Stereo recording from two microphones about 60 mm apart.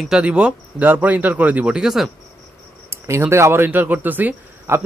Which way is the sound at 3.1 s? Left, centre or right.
Right.